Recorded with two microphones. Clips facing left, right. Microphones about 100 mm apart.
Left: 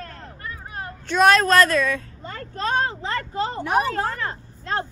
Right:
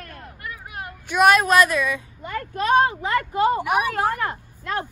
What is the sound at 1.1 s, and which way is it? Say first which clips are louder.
Speech: even; 10° right (ahead or behind).